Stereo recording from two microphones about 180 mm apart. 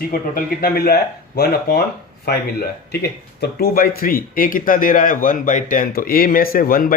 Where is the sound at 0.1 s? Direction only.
55° left (ahead or behind).